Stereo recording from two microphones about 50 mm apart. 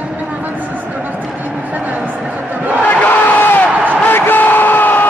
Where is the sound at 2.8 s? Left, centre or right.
Left.